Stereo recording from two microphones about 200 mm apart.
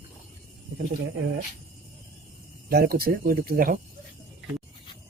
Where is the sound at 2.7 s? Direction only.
50° right (ahead or behind).